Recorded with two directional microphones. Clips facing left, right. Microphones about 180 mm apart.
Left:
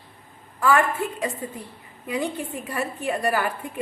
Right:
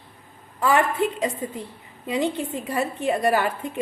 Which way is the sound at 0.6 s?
20° right (ahead or behind).